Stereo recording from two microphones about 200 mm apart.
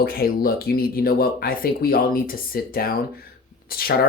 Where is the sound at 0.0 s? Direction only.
50° left (ahead or behind).